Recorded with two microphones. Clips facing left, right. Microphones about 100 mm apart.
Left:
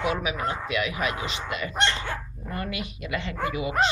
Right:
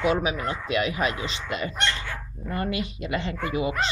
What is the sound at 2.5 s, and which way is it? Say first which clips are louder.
Speech: right 4 dB; 30° right (ahead or behind).